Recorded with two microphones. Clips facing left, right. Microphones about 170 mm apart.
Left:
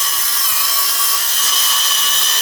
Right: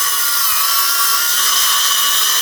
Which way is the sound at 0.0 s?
15° left (ahead or behind).